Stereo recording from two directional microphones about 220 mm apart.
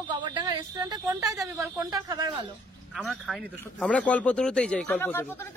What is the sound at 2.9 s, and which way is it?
A man's voice, centre (ahead or behind).